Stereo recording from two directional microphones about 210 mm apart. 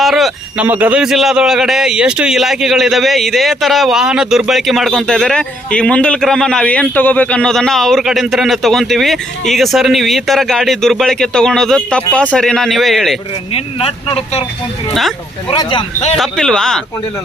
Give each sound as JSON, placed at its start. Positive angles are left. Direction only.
{"t": 0.0, "sound": "a man's voice", "side_deg": 0}
{"t": 13.5, "sound": "speech", "side_deg": 25}
{"t": 15.4, "sound": "speech", "side_deg": 25}
{"t": 16.1, "sound": "a man's voice", "side_deg": 0}